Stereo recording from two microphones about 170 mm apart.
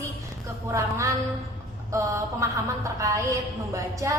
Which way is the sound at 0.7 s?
15° right (ahead or behind).